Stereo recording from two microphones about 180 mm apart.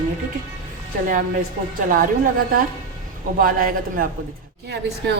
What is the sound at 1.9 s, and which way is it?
A woman's voice, 50° right (ahead or behind).